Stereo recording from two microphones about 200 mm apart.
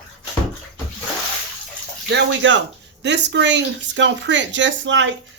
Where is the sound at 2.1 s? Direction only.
65° right (ahead or behind).